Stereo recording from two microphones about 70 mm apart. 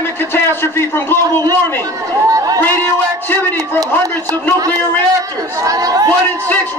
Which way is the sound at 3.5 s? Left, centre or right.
Right.